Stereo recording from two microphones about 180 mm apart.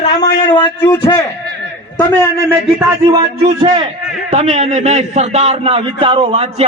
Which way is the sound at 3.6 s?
25° right (ahead or behind).